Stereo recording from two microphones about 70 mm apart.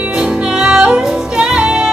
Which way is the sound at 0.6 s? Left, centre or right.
Centre.